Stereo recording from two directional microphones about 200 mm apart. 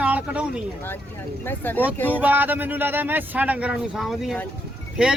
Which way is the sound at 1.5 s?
10° left (ahead or behind).